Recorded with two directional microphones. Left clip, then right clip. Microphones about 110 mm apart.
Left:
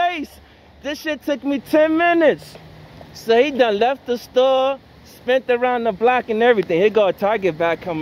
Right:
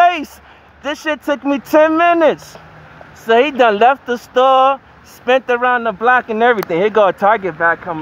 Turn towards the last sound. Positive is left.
turn(degrees=20)  # may be behind; listen again after turning